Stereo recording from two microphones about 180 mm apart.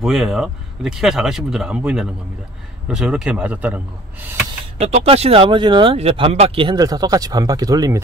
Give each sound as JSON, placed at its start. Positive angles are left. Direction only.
{"t": 0.0, "sound": "a man's voice", "side_deg": 0}
{"t": 4.7, "sound": "speech", "side_deg": -35}